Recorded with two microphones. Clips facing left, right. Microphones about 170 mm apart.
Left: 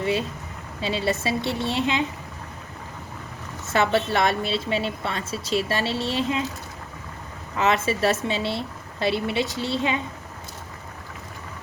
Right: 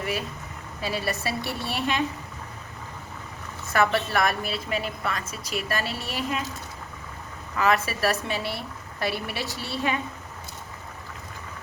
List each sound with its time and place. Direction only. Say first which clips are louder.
0.0 s a woman's voice: left 5 dB; 25° left (ahead or behind)
3.7 s a woman's voice: left 2 dB; 25° left (ahead or behind)
7.6 s a woman's voice: left 2 dB; 25° left (ahead or behind)